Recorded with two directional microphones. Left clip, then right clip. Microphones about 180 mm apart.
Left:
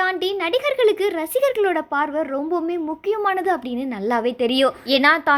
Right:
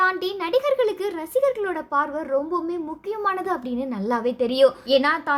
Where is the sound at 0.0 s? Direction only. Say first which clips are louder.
Left 1 dB; 10° left (ahead or behind).